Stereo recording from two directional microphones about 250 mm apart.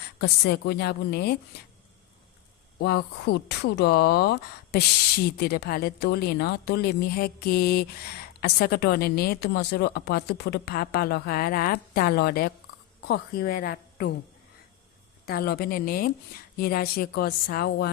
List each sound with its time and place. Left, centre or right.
0.2 s speech: left
2.7 s speech: left
15.3 s speech: left